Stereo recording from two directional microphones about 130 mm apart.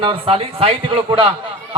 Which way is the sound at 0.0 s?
45° right (ahead or behind).